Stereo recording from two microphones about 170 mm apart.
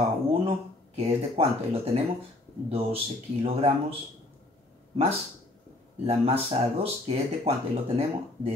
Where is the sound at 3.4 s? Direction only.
30° right (ahead or behind).